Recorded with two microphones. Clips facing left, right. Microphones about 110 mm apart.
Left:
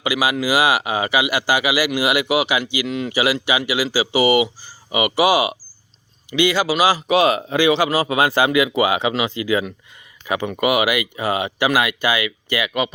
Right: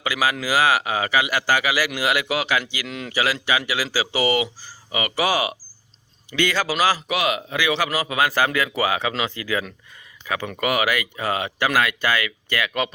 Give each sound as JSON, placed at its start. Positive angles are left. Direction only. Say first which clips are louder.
{"t": 0.0, "sound": "speech", "louder": "left 3 dB", "side_deg": 10}
{"t": 7.1, "sound": "speech", "louder": "left 7 dB", "side_deg": 30}
{"t": 8.4, "sound": "speech", "louder": "left 5 dB", "side_deg": 15}